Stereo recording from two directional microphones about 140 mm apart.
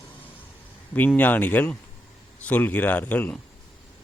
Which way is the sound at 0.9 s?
10° left (ahead or behind).